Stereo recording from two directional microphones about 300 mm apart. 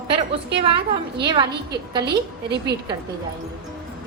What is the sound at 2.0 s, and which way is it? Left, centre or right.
Speech, right.